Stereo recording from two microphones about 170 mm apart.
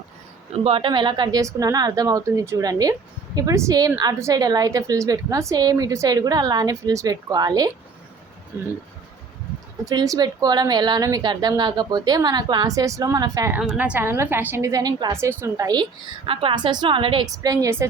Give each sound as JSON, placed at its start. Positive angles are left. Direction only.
{"t": 0.5, "sound": "a woman's voice", "side_deg": -35}
{"t": 9.8, "sound": "a woman's voice", "side_deg": -20}
{"t": 13.5, "sound": "a woman's voice", "side_deg": -10}